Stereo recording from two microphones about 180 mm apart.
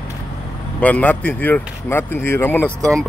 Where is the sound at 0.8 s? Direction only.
10° left (ahead or behind).